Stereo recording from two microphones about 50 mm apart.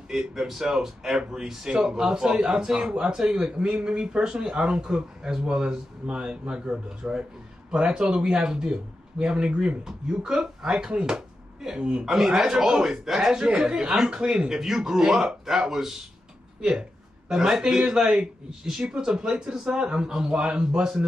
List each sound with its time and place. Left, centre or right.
0.1 s a man's voice: centre
17.3 s a man's voice: centre